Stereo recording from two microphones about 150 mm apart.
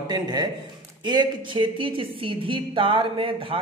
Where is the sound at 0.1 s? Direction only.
30° right (ahead or behind).